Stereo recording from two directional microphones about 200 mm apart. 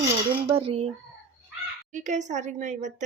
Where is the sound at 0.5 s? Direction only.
30° right (ahead or behind).